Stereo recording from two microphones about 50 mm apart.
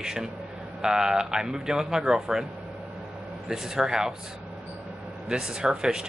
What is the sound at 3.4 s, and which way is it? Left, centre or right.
Speech, centre.